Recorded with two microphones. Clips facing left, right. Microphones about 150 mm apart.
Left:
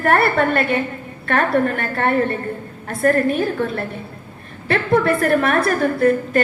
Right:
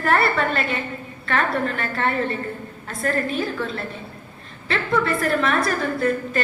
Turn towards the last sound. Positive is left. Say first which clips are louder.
# left 6 dB
turn(degrees=55)  # may be behind; listen again after turning